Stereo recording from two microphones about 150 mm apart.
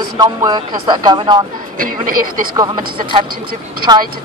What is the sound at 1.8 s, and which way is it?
Speech, 70° right (ahead or behind).